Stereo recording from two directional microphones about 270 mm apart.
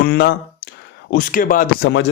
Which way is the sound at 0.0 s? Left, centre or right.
Left.